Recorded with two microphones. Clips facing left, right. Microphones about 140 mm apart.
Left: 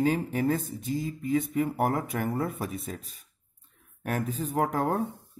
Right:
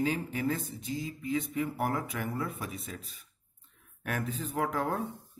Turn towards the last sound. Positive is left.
turn(degrees=45)  # may be behind; listen again after turning